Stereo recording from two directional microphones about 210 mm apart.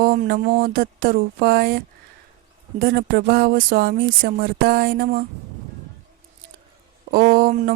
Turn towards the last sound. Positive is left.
turn(degrees=-45)  # may be behind; listen again after turning